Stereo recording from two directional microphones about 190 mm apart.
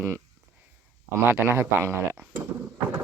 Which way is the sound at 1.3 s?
10° right (ahead or behind).